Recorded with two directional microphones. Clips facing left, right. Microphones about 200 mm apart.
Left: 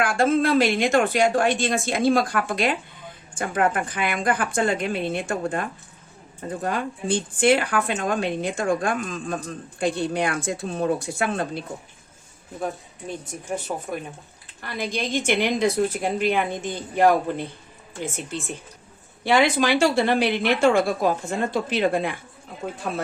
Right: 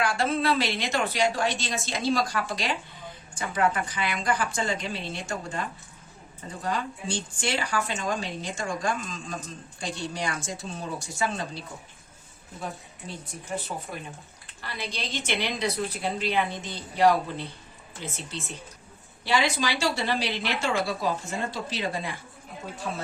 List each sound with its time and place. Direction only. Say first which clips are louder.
0.0 s a woman's voice: left 6 dB; 50° left (ahead or behind)
13.9 s a woman's voice: left 7 dB; 55° left (ahead or behind)